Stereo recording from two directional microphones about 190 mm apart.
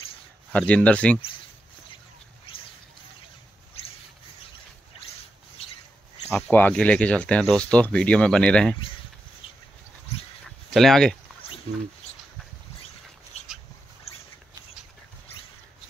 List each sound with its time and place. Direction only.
0.5 s speech: 5° left (ahead or behind)
6.2 s speech: 10° left (ahead or behind)
10.7 s speech: centre (ahead or behind)
14.1 s a sound: 30° left (ahead or behind)